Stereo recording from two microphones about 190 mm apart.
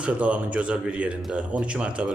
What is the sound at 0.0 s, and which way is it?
Speech, 5° right (ahead or behind).